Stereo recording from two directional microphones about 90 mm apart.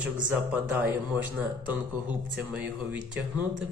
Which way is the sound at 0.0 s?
15° right (ahead or behind).